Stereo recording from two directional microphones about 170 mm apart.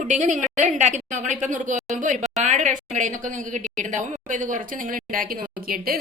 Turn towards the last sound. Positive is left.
turn(degrees=-60)  # may be behind; listen again after turning